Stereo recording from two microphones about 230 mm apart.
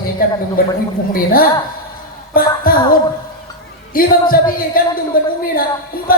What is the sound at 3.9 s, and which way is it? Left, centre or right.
Speech, left.